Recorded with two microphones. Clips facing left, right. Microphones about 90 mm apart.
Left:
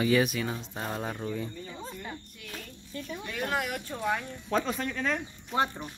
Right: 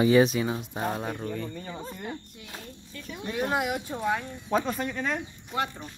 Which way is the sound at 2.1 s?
20° right (ahead or behind).